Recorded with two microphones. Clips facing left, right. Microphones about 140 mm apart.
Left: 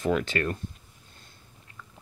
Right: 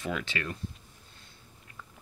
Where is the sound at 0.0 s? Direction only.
45° left (ahead or behind).